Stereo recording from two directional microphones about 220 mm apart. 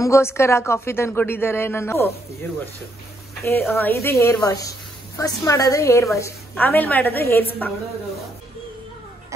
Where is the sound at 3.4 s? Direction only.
10° left (ahead or behind).